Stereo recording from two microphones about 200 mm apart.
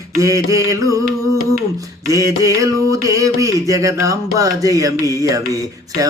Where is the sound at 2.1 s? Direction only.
15° right (ahead or behind).